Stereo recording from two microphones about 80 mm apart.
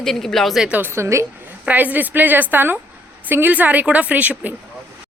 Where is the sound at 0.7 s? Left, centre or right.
Right.